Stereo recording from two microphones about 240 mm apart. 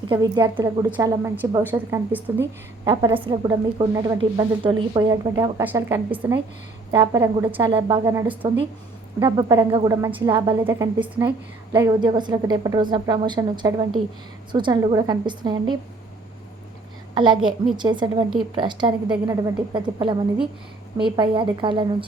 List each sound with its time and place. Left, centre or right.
0.1 s a woman's voice: centre
17.2 s a woman's voice: centre